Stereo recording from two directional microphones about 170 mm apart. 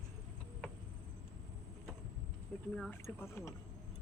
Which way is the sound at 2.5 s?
Centre (ahead or behind).